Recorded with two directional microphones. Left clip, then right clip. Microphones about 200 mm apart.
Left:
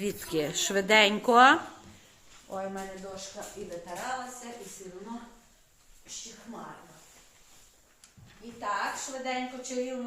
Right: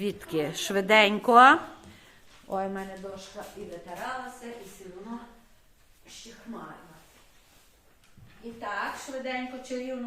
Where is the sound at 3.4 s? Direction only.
5° right (ahead or behind).